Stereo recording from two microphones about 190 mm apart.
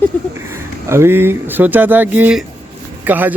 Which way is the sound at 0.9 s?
15° right (ahead or behind).